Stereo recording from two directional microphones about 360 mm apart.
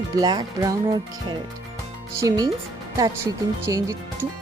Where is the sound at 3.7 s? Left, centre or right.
Centre.